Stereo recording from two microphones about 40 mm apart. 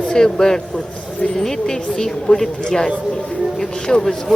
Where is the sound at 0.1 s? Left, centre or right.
Centre.